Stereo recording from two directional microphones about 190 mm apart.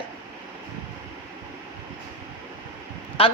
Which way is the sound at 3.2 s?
30° left (ahead or behind).